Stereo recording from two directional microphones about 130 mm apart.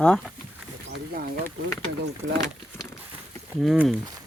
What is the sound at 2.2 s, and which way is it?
Speech, 20° right (ahead or behind).